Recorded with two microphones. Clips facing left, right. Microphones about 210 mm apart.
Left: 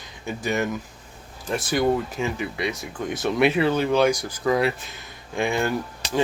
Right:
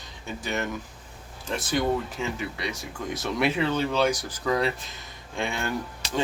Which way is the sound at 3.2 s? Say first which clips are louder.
Left 5 dB; 60° left (ahead or behind).